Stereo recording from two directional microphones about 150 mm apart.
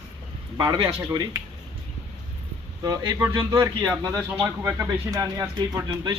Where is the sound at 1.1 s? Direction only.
25° right (ahead or behind).